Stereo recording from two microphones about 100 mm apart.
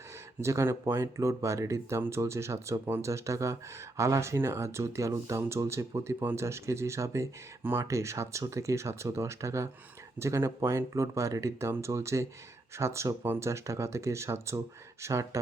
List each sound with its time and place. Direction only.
0.4 s speech: 30° right (ahead or behind)